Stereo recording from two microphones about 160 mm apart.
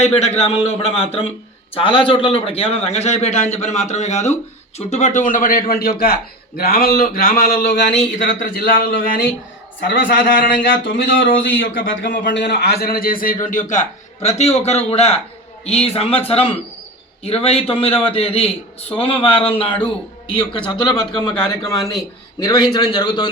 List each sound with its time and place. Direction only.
0.0 s a man's voice: 40° left (ahead or behind); by 7.9 s 90° left
7.9 s a man's voice: 60° left (ahead or behind); by 23.3 s 30° left (ahead or behind)